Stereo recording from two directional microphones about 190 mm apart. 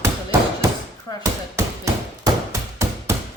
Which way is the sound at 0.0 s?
15° right (ahead or behind).